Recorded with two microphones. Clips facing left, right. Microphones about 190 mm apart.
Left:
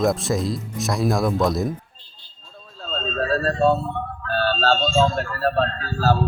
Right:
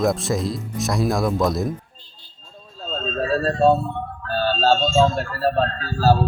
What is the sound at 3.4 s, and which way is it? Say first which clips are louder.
Speech: right 3 dB; 15° right (ahead or behind).